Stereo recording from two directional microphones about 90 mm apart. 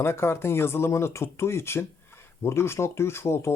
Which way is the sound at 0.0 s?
30° left (ahead or behind).